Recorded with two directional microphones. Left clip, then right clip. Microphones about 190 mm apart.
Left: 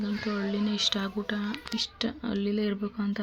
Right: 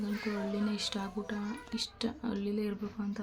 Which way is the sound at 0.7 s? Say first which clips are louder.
Left 8 dB; 10° left (ahead or behind).